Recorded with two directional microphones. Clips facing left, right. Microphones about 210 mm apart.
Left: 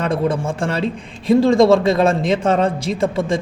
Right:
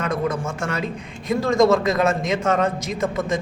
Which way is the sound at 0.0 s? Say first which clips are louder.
Left 4 dB; 30° left (ahead or behind).